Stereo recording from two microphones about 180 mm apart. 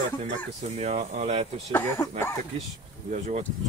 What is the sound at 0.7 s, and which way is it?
Speech, 40° right (ahead or behind).